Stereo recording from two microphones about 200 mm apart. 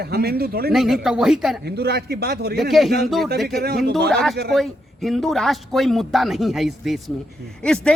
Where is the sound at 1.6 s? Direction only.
55° right (ahead or behind).